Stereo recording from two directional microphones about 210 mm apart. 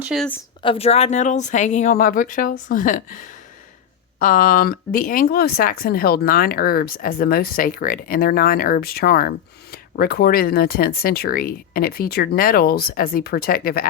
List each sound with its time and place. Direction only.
0.0 s a woman's voice: 5° right (ahead or behind)
0.6 s speech: 25° left (ahead or behind); by 13.8 s 45° left (ahead or behind)